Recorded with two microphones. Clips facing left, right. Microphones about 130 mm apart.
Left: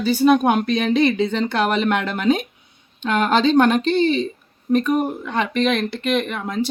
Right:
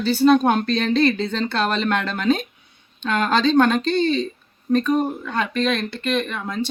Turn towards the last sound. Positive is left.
turn(degrees=15)  # may be behind; listen again after turning